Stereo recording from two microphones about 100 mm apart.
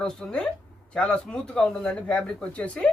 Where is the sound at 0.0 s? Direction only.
5° left (ahead or behind).